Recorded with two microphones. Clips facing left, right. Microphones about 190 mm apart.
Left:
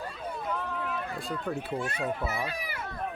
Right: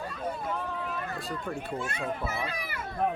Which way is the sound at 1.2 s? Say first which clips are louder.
Left 2 dB; centre (ahead or behind).